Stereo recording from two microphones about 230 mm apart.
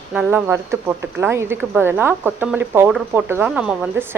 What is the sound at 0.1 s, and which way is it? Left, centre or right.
A woman's voice, centre.